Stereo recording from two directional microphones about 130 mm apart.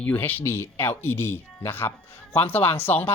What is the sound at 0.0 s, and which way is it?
Speech, 15° left (ahead or behind).